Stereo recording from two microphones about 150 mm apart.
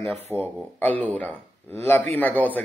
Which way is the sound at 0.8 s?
10° left (ahead or behind).